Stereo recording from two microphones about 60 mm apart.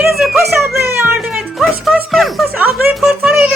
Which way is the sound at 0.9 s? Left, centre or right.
Right.